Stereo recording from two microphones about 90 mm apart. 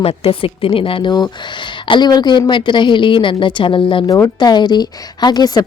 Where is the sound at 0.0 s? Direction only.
90° left.